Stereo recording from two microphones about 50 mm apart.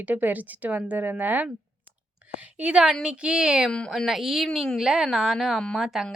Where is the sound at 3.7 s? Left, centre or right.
Centre.